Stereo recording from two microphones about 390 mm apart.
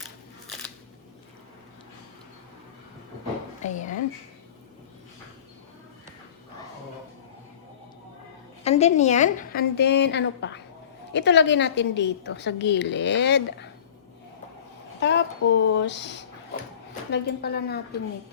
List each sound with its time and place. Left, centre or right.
3.6 s speech: centre
8.6 s a woman's voice: centre
15.0 s a woman's voice: left